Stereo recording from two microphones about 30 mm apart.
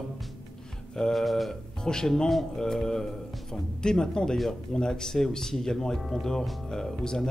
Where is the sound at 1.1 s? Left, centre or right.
Centre.